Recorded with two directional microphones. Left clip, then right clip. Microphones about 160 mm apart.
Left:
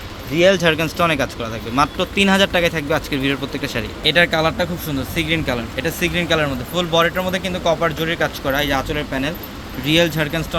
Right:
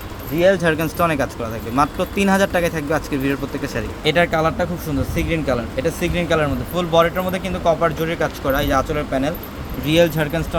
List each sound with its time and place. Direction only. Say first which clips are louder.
0.3 s speech: left 1 dB; 25° left (ahead or behind)
0.6 s speech: left 1 dB; 10° left (ahead or behind)
4.0 s speech: left 1 dB; centre (ahead or behind)